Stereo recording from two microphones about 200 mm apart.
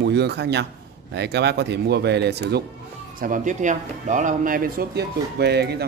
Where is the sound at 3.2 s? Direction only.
40° right (ahead or behind).